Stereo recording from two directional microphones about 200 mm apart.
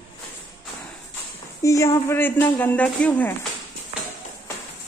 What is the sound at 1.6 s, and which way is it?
Speech, 15° left (ahead or behind).